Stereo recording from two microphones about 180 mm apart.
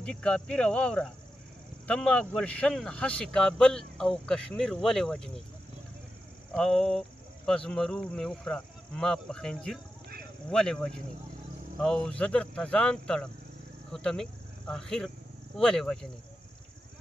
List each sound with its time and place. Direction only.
0.0 s speech: 5° left (ahead or behind)
6.5 s speech: centre (ahead or behind)